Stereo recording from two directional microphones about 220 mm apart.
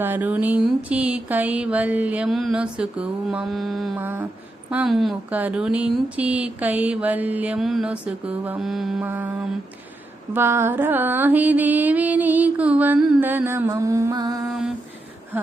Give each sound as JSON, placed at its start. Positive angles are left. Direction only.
{"t": 0.0, "sound": "speech", "side_deg": -10}
{"t": 10.3, "sound": "music", "side_deg": -10}
{"t": 14.4, "sound": "speech", "side_deg": 0}